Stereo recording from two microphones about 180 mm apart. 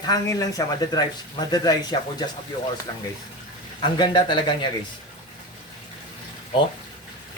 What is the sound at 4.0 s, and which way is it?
Speech, 25° left (ahead or behind).